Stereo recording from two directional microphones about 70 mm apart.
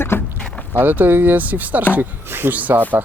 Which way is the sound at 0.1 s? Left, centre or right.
Left.